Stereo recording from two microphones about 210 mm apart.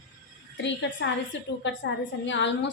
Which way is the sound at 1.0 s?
60° left (ahead or behind).